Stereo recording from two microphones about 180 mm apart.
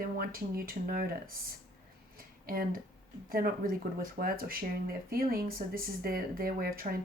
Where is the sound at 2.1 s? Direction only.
55° right (ahead or behind).